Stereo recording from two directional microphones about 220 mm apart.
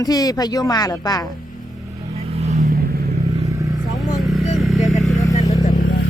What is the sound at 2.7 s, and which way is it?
Vehicle, 45° right (ahead or behind).